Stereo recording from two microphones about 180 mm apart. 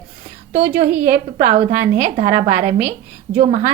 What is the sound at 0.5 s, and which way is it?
A woman's voice, 30° right (ahead or behind).